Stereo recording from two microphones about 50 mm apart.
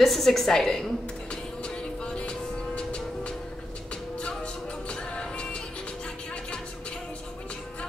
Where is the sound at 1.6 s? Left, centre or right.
Centre.